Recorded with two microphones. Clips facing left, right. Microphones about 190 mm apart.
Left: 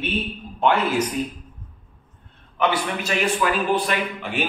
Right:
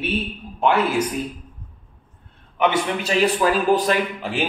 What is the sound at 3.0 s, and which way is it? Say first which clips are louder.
A man's voice: right 4 dB; 35° right (ahead or behind).